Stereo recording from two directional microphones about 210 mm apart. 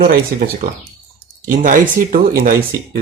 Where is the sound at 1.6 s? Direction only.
40° right (ahead or behind).